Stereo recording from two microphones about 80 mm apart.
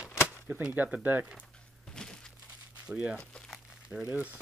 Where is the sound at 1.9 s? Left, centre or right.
Centre.